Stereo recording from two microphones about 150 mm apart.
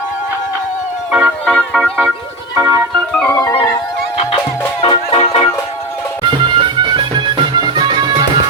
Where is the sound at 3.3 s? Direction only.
25° left (ahead or behind).